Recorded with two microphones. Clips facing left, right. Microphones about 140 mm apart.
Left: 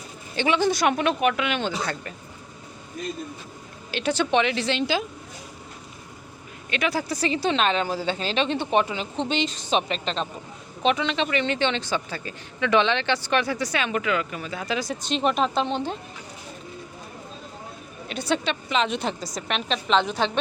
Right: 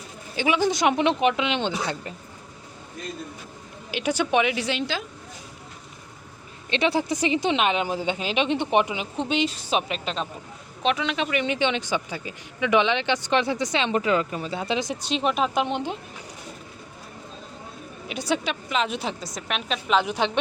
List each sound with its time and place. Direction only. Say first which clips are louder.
0.3 s speech: even; 10° right (ahead or behind)
0.7 s speech: right 1 dB; 20° right (ahead or behind)
3.9 s speech: even; 10° right (ahead or behind)
6.7 s speech: right 3 dB; 30° right (ahead or behind)
15.0 s speech: left 3 dB; 5° right (ahead or behind)
18.1 s a woman's voice: left 1 dB; 10° right (ahead or behind)